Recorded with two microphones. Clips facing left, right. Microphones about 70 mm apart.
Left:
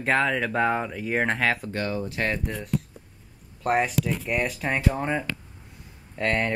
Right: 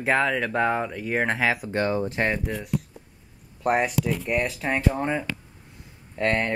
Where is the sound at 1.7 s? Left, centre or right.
Right.